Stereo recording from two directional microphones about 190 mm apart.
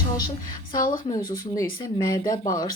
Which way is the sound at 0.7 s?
45° left (ahead or behind).